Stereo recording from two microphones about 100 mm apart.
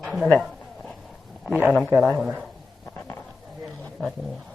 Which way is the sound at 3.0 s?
25° left (ahead or behind).